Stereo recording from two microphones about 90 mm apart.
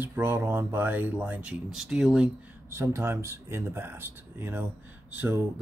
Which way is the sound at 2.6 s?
30° right (ahead or behind).